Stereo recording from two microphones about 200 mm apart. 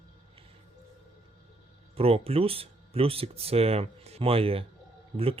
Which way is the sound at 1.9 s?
30° right (ahead or behind).